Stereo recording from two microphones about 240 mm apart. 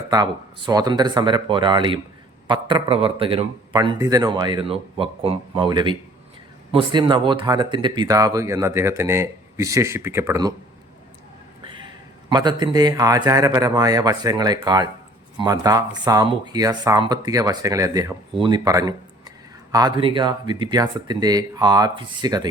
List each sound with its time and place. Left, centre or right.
0.1 s a man's voice: centre
12.3 s speech: centre